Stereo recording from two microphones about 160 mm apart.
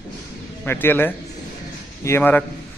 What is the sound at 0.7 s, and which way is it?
Speech, 10° left (ahead or behind).